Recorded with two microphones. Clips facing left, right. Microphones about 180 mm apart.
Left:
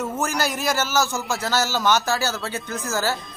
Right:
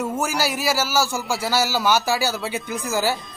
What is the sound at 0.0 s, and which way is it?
A man's voice, 10° right (ahead or behind).